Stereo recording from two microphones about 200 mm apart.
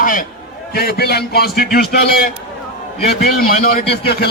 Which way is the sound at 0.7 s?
50° left (ahead or behind).